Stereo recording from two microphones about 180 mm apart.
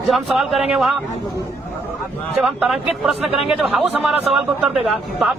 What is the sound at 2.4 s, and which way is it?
Speech, 5° right (ahead or behind).